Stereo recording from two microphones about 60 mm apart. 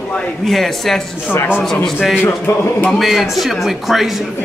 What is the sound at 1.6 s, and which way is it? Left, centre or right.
Speech, centre.